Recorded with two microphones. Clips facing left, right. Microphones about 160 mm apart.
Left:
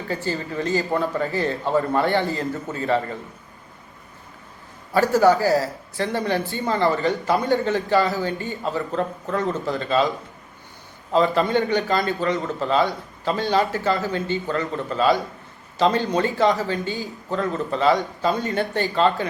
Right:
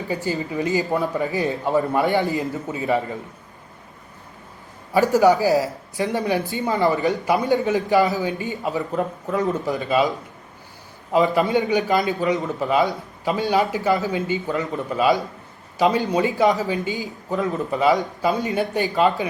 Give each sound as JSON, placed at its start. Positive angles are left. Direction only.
{"t": 0.5, "sound": "a man's voice", "side_deg": -15}
{"t": 5.1, "sound": "a man's voice", "side_deg": -15}
{"t": 11.1, "sound": "a man's voice", "side_deg": -10}
{"t": 12.0, "sound": "a man's voice", "side_deg": -15}